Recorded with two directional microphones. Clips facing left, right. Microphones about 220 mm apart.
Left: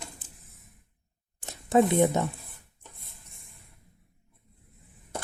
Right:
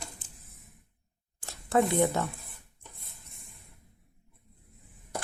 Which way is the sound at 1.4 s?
20° left (ahead or behind).